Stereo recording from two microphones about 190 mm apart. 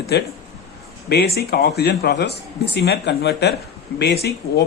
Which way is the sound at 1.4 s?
55° left (ahead or behind).